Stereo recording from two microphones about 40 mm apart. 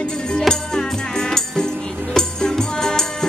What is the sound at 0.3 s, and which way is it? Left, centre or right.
Music, centre.